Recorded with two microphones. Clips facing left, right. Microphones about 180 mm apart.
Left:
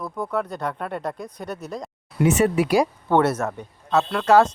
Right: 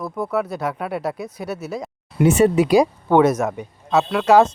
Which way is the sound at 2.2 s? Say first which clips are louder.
Right 4 dB; 25° right (ahead or behind).